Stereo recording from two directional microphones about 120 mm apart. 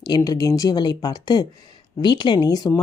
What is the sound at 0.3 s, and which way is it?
Speech, 30° left (ahead or behind).